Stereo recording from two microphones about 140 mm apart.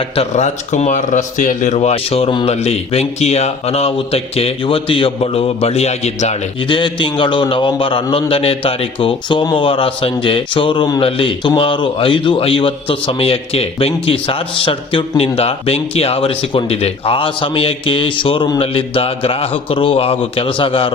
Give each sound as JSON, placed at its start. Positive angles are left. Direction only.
{"t": 0.0, "sound": "speech", "side_deg": 50}
{"t": 6.6, "sound": "speech", "side_deg": 35}